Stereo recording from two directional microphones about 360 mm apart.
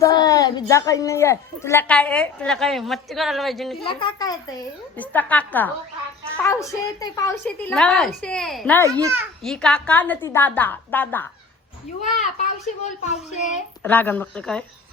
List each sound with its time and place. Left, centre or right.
0.0 s a child's voice: centre
3.8 s a woman's voice: centre
9.0 s a child's voice: centre
12.2 s a child's voice: centre
13.8 s a child's voice: centre